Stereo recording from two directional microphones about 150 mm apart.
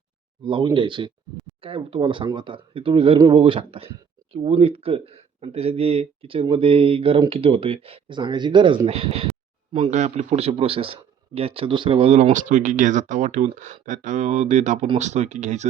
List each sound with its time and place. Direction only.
0.4 s speech: 35° right (ahead or behind)
8.9 s speech: 45° right (ahead or behind)
12.1 s speech: 55° right (ahead or behind)